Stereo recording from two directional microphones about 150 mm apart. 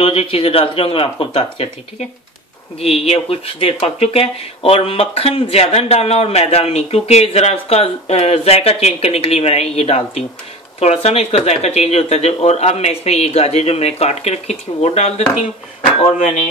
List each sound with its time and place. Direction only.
0.0 s speech: 40° left (ahead or behind)